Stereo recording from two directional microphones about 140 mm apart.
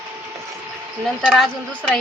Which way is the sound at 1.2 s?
Centre (ahead or behind).